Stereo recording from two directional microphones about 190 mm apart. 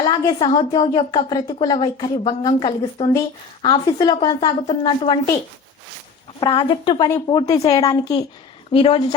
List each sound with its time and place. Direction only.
0.0 s a woman's voice: 25° left (ahead or behind)
6.4 s a woman's voice: 25° left (ahead or behind)